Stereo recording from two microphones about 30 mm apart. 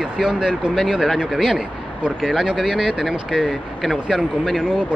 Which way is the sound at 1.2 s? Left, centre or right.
Centre.